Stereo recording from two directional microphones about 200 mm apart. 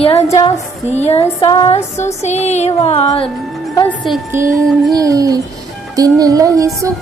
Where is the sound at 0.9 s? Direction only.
30° left (ahead or behind).